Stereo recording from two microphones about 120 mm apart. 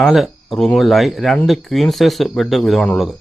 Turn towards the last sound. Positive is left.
turn(degrees=0)  # may be behind; listen again after turning